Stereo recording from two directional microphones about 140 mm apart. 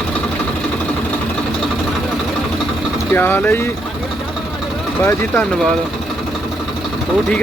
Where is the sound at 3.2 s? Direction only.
15° left (ahead or behind).